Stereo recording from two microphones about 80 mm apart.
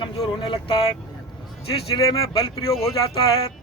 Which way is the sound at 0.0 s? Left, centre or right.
Left.